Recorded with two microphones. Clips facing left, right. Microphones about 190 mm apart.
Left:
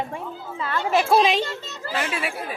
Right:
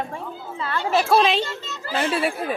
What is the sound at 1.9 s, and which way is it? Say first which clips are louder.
Speech: right 5 dB; 35° right (ahead or behind).